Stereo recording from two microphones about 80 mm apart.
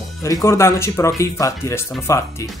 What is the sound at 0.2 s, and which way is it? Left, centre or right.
Speech, left.